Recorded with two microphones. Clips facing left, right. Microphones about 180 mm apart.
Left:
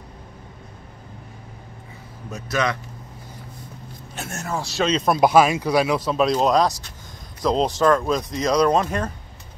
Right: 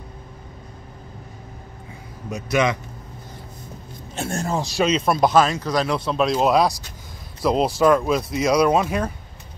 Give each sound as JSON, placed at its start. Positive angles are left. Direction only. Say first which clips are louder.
{"t": 2.3, "sound": "speech", "louder": "right 3 dB", "side_deg": -20}
{"t": 4.1, "sound": "a man's voice", "louder": "right 5 dB", "side_deg": -30}
{"t": 4.6, "sound": "speech", "louder": "even", "side_deg": -15}
{"t": 5.2, "sound": "speech", "louder": "left 3 dB", "side_deg": 10}